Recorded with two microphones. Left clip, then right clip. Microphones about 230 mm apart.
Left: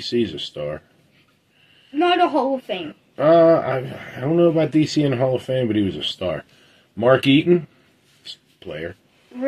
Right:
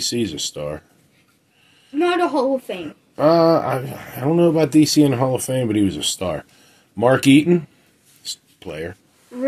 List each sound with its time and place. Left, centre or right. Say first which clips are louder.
0.0 s speech: even; right
2.0 s speech: left 1 dB; centre
3.2 s speech: left 1 dB; right
8.2 s a sound: right 5 dB; right